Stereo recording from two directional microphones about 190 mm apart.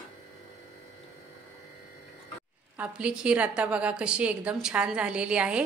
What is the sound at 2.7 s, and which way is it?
A woman's voice, 5° right (ahead or behind).